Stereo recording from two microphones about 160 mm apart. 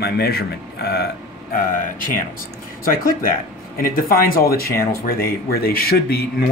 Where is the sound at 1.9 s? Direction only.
60° left (ahead or behind).